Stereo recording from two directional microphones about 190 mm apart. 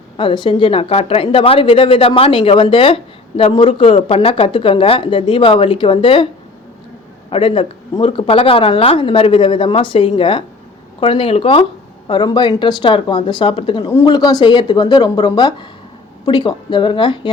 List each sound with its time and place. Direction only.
0.2 s a woman's voice: 25° left (ahead or behind)
7.3 s a woman's voice: 30° left (ahead or behind)